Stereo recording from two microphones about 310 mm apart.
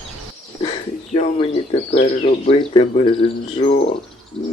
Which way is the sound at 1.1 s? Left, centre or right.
Centre.